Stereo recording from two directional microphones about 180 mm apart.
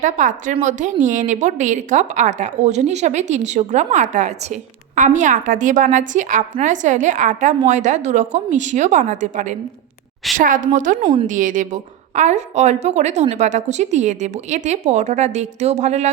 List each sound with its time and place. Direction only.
0.0 s a woman's voice: 45° right (ahead or behind)
11.0 s a woman's voice: 30° right (ahead or behind)
11.3 s a woman's voice: 45° right (ahead or behind)